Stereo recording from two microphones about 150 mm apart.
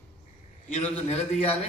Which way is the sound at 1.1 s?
45° left (ahead or behind).